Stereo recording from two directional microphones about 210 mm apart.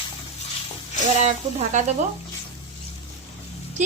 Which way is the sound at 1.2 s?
35° right (ahead or behind).